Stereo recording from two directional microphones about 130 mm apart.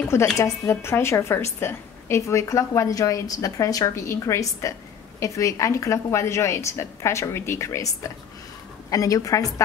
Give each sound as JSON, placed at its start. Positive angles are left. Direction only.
{"t": 0.0, "sound": "a sound", "side_deg": 20}
{"t": 0.4, "sound": "a woman's voice", "side_deg": 20}
{"t": 8.9, "sound": "a woman's voice", "side_deg": 25}